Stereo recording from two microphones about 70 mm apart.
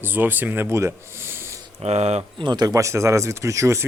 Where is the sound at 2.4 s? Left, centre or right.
Right.